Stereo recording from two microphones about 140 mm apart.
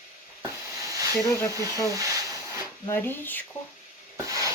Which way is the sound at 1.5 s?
25° right (ahead or behind).